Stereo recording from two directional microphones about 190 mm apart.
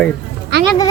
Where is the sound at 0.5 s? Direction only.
65° right (ahead or behind).